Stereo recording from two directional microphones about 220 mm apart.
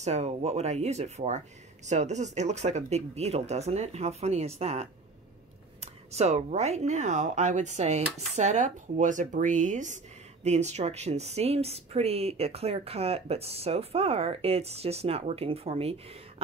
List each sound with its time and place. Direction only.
0.0 s speech: 30° right (ahead or behind)